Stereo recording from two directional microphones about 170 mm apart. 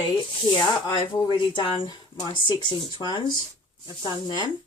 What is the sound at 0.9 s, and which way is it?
Speech, 25° left (ahead or behind).